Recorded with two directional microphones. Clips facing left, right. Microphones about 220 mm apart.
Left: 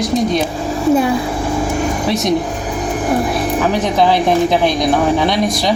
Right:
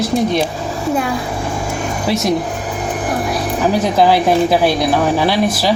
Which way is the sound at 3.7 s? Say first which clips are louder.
Right 3 dB; 10° right (ahead or behind).